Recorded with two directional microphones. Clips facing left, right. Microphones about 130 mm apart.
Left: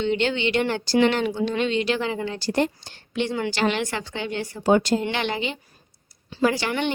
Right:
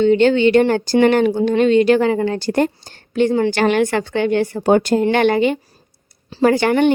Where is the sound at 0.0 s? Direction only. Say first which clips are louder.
Right 11 dB; 45° right (ahead or behind).